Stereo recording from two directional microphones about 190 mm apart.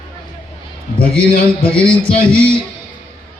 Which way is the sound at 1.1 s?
5° left (ahead or behind).